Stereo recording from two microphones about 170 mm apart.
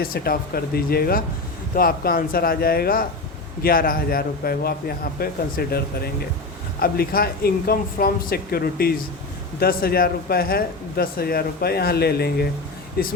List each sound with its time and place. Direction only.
0.0 s speech: 60° left (ahead or behind)